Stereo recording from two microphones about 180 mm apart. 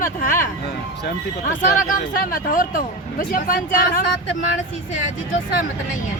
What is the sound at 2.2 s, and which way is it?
Speech, 50° left (ahead or behind).